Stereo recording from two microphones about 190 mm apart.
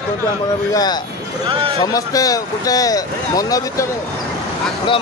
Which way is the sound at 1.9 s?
20° left (ahead or behind).